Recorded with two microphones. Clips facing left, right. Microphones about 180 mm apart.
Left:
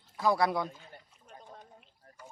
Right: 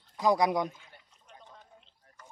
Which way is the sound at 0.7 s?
40° left (ahead or behind).